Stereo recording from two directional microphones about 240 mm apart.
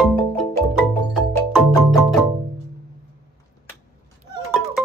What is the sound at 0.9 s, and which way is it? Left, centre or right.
Music, centre.